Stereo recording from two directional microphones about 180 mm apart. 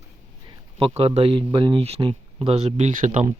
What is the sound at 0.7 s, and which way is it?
Speech, 30° right (ahead or behind).